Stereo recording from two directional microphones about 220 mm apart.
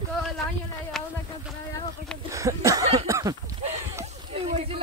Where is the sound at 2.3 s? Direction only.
15° right (ahead or behind).